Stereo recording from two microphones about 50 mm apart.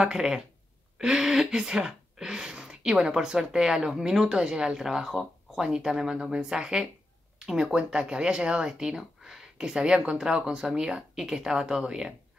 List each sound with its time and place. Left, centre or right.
0.0 s speech: centre